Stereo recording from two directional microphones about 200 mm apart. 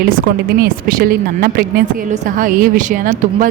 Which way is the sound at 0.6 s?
45° right (ahead or behind).